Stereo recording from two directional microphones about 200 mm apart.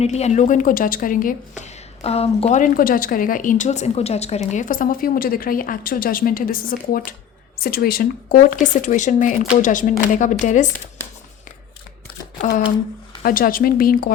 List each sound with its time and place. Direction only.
0.0 s a woman's voice: 35° left (ahead or behind)
13.2 s a woman's voice: 45° left (ahead or behind)